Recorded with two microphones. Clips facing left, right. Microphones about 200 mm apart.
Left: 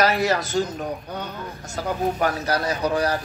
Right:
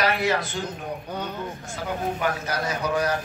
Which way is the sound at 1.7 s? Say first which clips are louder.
Left 5 dB; 40° left (ahead or behind).